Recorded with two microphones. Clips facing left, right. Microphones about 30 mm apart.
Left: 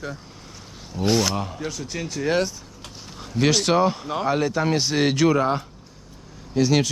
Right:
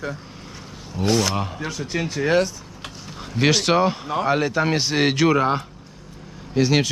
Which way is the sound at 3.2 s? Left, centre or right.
Centre.